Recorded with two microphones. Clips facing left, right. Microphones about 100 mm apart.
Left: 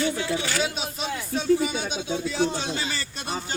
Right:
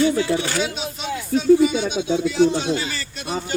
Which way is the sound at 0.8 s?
40° left (ahead or behind).